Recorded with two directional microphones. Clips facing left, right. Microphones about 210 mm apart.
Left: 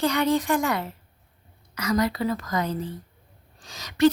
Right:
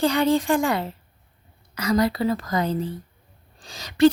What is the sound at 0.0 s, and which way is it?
A woman's voice, 30° right (ahead or behind).